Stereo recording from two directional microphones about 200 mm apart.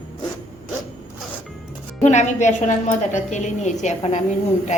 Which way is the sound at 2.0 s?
35° left (ahead or behind).